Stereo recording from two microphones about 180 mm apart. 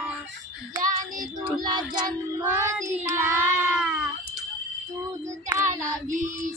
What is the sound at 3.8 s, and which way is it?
Cat, 5° right (ahead or behind).